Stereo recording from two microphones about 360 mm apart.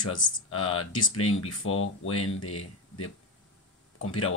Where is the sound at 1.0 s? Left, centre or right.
Centre.